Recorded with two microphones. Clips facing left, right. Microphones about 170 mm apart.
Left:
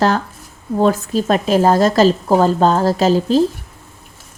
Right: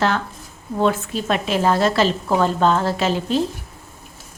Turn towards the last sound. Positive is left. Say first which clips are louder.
# left 6 dB
turn(degrees=35)  # may be behind; listen again after turning